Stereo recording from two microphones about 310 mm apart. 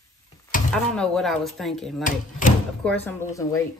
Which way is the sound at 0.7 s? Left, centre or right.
Centre.